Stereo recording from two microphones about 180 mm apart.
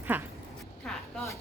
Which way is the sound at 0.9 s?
Centre (ahead or behind).